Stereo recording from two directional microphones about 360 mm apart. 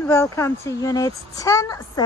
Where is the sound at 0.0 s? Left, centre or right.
Centre.